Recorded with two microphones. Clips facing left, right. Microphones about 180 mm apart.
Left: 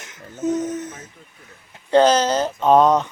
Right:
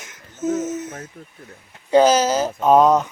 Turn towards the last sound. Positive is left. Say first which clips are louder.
# right 1 dB
turn(degrees=-5)  # may be behind; listen again after turning